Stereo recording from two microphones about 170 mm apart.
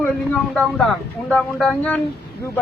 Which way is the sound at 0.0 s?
5° left (ahead or behind).